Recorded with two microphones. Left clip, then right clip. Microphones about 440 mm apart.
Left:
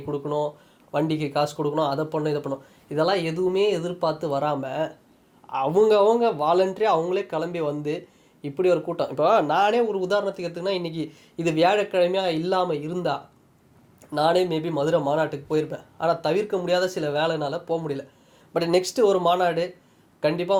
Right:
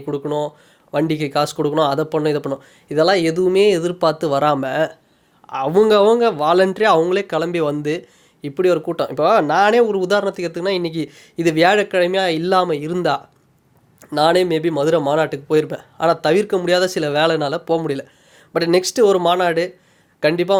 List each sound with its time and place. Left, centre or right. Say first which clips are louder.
0.1 s speech: right 4 dB; right
18.5 s a man's voice: right 6 dB; right